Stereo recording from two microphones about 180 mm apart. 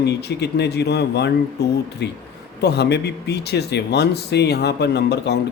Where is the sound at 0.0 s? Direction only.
65° left (ahead or behind).